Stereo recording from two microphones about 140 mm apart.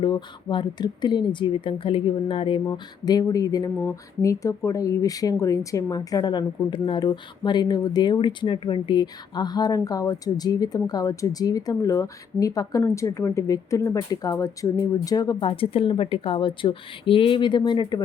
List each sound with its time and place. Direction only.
0.0 s speech: 30° left (ahead or behind)